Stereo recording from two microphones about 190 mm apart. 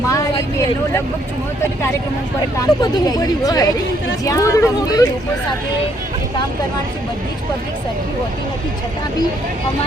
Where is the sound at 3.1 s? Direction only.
20° left (ahead or behind).